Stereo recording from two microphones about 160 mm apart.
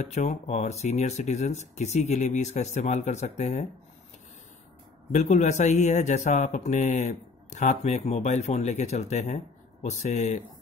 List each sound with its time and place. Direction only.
0.0 s speech: 45° left (ahead or behind)
5.1 s speech: 50° left (ahead or behind)